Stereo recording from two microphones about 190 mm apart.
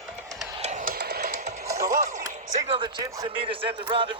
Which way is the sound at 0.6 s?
40° right (ahead or behind).